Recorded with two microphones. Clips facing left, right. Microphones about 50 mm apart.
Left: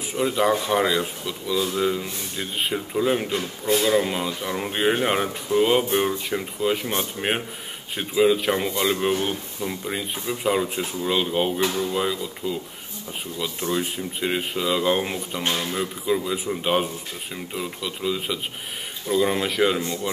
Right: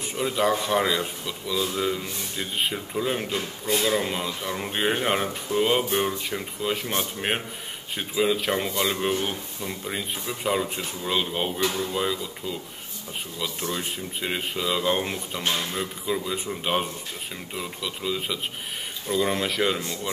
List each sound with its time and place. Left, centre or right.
0.1 s speech: centre
11.6 s speech: left
11.9 s speech: centre